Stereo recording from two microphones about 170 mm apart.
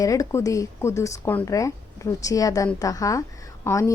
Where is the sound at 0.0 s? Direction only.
20° left (ahead or behind).